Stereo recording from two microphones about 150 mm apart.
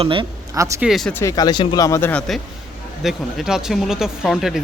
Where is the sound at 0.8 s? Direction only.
Centre (ahead or behind).